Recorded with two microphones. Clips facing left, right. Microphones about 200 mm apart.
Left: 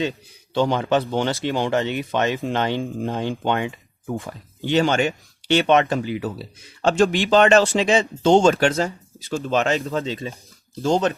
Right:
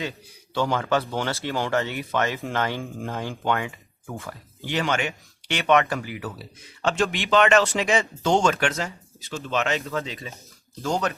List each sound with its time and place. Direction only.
0.5 s speech: 20° left (ahead or behind)